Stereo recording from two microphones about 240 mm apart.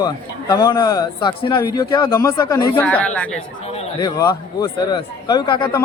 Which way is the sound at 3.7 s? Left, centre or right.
Left.